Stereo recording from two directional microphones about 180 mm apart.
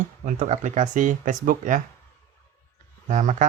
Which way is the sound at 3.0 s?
45° right (ahead or behind).